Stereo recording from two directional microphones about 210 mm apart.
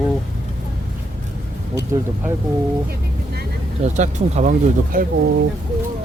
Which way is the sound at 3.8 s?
35° right (ahead or behind).